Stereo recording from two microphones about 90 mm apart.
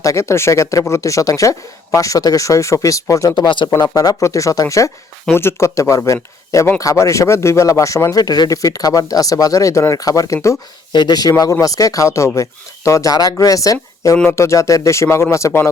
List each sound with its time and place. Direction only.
0.0 s speech: 35° left (ahead or behind)
3.3 s speech: 60° left (ahead or behind)
3.9 s speech: 40° left (ahead or behind)
10.9 s speech: 55° left (ahead or behind); by 15.7 s 30° left (ahead or behind)